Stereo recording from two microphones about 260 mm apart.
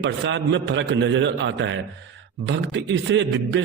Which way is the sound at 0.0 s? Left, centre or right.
Right.